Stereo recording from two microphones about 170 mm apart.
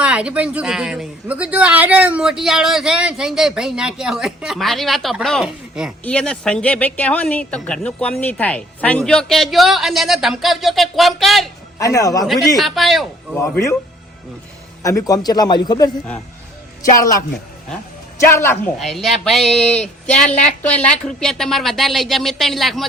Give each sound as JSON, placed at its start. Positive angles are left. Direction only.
{"t": 0.0, "sound": "a woman's voice", "side_deg": -5}
{"t": 11.8, "sound": "a man's voice", "side_deg": 20}
{"t": 12.2, "sound": "a woman's voice", "side_deg": 0}
{"t": 13.3, "sound": "speech", "side_deg": 15}
{"t": 14.8, "sound": "a man's voice", "side_deg": 20}
{"t": 17.0, "sound": "a man's voice", "side_deg": 20}
{"t": 18.3, "sound": "speech", "side_deg": 15}
{"t": 18.8, "sound": "a woman's voice", "side_deg": 0}